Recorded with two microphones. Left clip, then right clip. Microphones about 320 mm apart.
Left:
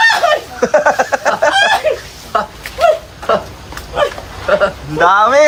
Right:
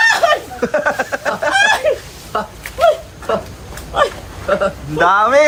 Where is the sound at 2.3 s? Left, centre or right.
Left.